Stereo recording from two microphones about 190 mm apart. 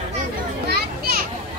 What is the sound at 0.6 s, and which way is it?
Children playing, 50° right (ahead or behind).